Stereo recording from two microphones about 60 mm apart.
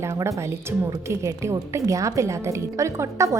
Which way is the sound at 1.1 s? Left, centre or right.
Right.